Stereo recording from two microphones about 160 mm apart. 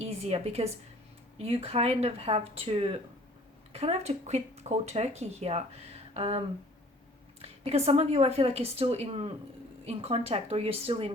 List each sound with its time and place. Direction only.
0.0 s speech: 40° right (ahead or behind)
7.4 s speech: 40° right (ahead or behind)